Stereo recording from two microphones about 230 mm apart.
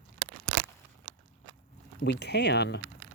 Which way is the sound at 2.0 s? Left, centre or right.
Left.